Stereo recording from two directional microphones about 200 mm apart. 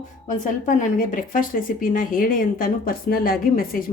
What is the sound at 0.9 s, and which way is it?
A woman's voice, 45° left (ahead or behind).